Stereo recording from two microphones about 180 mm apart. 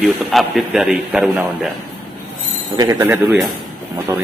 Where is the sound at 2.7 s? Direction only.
20° right (ahead or behind).